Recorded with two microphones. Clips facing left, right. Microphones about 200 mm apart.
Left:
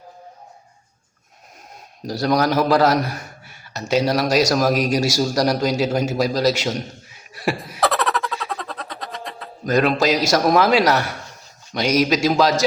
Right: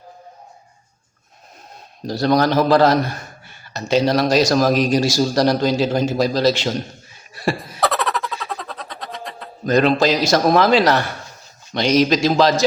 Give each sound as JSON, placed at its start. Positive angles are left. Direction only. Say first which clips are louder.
{"t": 2.0, "sound": "a man's voice", "louder": "right 2 dB", "side_deg": 10}
{"t": 7.6, "sound": "a sound", "louder": "even", "side_deg": 0}
{"t": 11.7, "sound": "a man's voice", "louder": "right 2 dB", "side_deg": 10}